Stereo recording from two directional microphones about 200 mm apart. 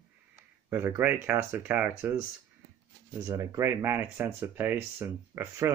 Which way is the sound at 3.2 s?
15° right (ahead or behind).